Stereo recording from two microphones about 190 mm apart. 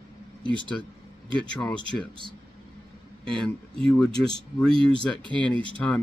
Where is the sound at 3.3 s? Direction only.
5° left (ahead or behind).